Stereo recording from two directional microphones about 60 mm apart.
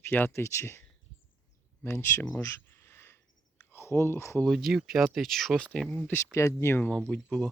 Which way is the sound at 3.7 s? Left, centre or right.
Left.